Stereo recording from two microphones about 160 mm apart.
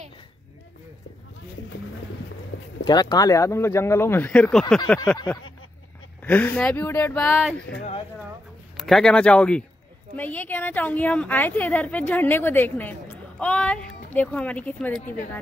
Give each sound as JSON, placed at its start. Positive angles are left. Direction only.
{"t": 2.8, "sound": "a woman's voice", "side_deg": 25}
{"t": 5.1, "sound": "a woman's voice", "side_deg": 20}
{"t": 7.7, "sound": "speech", "side_deg": 70}
{"t": 8.7, "sound": "a woman's voice", "side_deg": 0}